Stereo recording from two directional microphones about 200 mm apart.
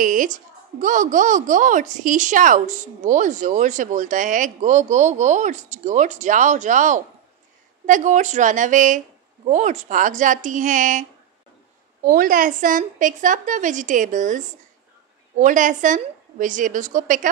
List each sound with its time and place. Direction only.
0.0 s a woman's voice: 40° right (ahead or behind)